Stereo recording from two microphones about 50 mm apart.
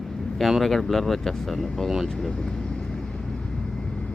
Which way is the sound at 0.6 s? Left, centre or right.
Centre.